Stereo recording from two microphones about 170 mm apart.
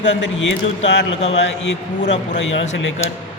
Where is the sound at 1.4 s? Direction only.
90° left.